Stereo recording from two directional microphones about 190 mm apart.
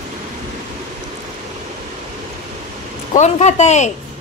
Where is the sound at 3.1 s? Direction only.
35° left (ahead or behind).